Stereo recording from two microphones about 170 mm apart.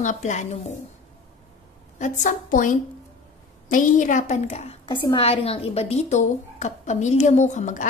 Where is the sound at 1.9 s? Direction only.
45° left (ahead or behind).